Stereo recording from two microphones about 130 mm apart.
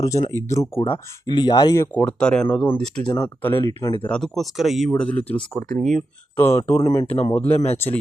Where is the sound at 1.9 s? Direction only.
5° left (ahead or behind).